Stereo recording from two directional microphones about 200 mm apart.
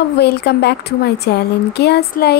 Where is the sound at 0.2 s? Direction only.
55° left (ahead or behind).